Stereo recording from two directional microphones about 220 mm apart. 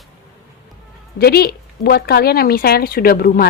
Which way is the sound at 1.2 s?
45° left (ahead or behind).